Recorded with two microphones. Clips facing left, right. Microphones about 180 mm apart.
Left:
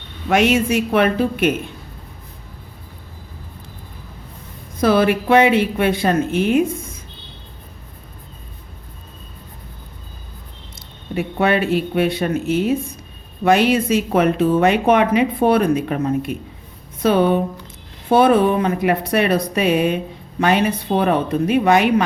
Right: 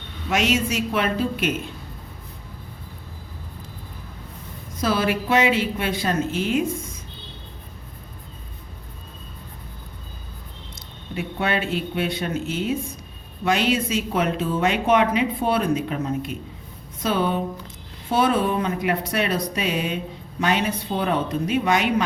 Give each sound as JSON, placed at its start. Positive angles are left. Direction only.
{"t": 0.3, "sound": "speech", "side_deg": 55}
{"t": 4.8, "sound": "speech", "side_deg": 55}
{"t": 11.1, "sound": "speech", "side_deg": 60}